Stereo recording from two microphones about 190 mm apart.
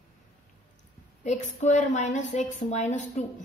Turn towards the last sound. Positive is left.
turn(degrees=40)  # may be behind; listen again after turning